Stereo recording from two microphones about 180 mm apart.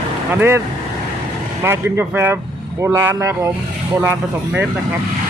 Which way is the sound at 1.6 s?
15° right (ahead or behind).